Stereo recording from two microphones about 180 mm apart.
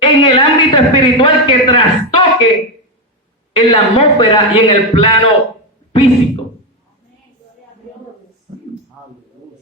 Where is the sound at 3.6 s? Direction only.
30° left (ahead or behind).